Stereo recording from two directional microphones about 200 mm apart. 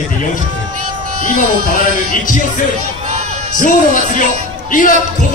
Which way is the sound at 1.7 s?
45° left (ahead or behind).